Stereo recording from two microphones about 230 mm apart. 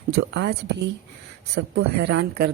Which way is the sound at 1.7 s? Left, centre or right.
Right.